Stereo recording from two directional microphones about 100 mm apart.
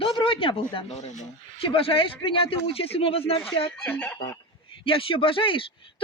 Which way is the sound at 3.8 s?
15° left (ahead or behind).